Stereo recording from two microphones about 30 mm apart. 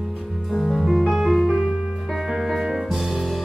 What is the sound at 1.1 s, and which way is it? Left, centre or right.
Music, centre.